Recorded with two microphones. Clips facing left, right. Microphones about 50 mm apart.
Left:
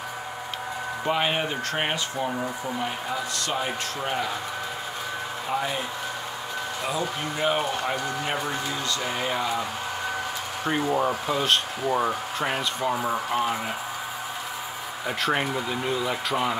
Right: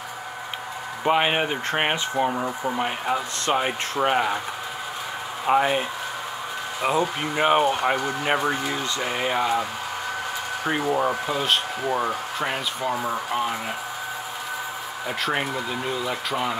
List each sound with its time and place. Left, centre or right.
1.0 s speech: right
5.5 s speech: right
7.9 s speech: centre
10.6 s speech: centre
15.0 s speech: centre